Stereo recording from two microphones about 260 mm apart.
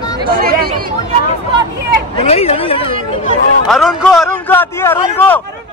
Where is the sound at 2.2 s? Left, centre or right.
Left.